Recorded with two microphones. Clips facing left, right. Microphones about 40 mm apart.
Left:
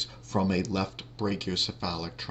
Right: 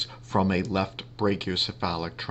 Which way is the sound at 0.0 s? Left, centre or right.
Right.